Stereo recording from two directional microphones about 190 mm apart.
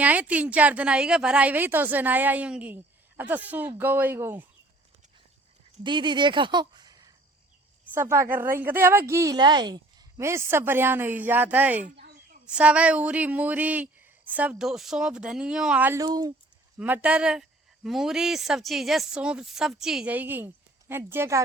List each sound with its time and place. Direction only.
0.0 s a woman's voice: 10° right (ahead or behind)
5.8 s a woman's voice: 25° right (ahead or behind); by 11.9 s 10° right (ahead or behind)
11.9 s a sound: 55° right (ahead or behind)
12.5 s a woman's voice: 5° right (ahead or behind)
16.7 s a woman's voice: 5° right (ahead or behind)